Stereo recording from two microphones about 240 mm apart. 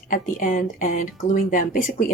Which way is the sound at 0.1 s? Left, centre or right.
Left.